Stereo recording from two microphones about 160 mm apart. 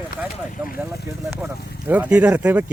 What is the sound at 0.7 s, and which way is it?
Speech, 15° right (ahead or behind).